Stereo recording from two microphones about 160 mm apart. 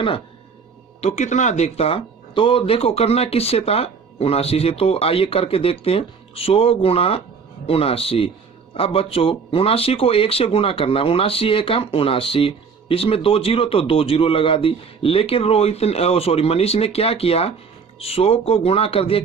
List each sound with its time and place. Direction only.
1.0 s speech: 45° left (ahead or behind)